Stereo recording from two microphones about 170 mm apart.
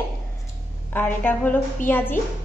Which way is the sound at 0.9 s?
10° left (ahead or behind).